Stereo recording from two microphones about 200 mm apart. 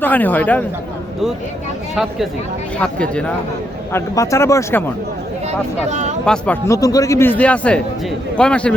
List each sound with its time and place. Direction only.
0.0 s speech: 10° left (ahead or behind)
2.7 s speech: 5° left (ahead or behind)
5.5 s speech: 35° right (ahead or behind)
6.2 s speech: 5° left (ahead or behind)